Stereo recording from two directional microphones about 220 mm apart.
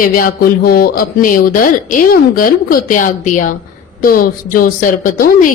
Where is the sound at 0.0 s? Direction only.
40° left (ahead or behind).